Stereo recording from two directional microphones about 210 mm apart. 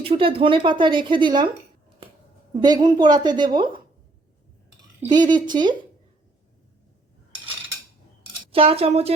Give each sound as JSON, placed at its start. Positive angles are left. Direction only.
{"t": 0.0, "sound": "a woman's voice", "side_deg": -25}
{"t": 2.5, "sound": "a woman's voice", "side_deg": -20}
{"t": 5.0, "sound": "a woman's voice", "side_deg": -20}
{"t": 8.5, "sound": "a woman's voice", "side_deg": -30}